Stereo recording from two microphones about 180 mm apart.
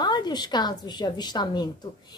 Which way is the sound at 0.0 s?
25° left (ahead or behind).